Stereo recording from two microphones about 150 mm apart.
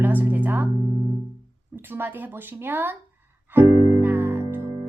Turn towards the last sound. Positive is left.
turn(degrees=-15)  # may be behind; listen again after turning